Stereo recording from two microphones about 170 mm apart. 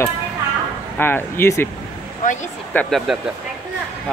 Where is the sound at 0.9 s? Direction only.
10° left (ahead or behind).